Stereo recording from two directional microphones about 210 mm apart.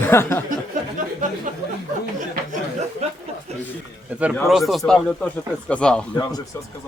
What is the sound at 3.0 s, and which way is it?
Speech, 30° right (ahead or behind).